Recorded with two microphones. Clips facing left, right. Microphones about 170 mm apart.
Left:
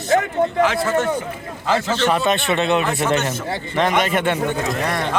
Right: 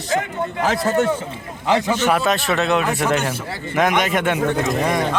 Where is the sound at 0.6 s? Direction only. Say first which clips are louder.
Even; 40° right (ahead or behind).